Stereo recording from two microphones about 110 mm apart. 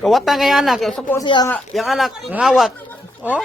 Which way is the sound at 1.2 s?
45° left (ahead or behind).